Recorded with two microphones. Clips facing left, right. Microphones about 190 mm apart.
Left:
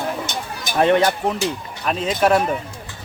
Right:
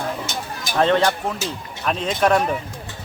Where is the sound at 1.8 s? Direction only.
Centre (ahead or behind).